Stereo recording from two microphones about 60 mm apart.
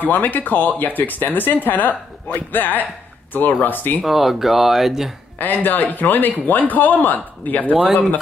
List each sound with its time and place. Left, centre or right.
0.0 s speech: left
4.0 s speech: centre
5.4 s a man's voice: left